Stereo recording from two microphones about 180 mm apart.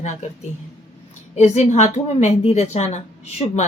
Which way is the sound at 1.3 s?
40° left (ahead or behind).